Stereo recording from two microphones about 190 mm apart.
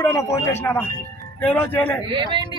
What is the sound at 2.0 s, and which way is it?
Speech, 25° right (ahead or behind).